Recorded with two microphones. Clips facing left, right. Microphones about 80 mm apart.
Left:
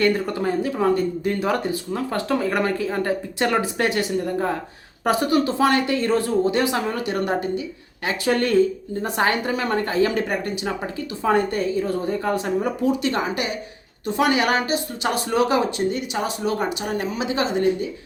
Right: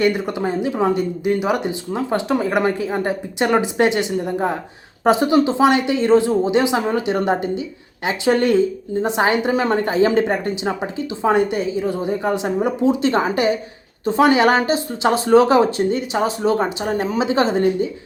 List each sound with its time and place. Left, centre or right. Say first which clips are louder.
0.0 s a woman's voice: right 2 dB; centre